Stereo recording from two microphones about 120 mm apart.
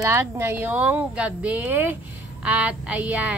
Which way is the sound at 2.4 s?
10° right (ahead or behind).